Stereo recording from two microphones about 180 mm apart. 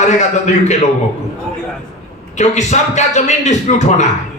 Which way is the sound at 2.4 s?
40° left (ahead or behind).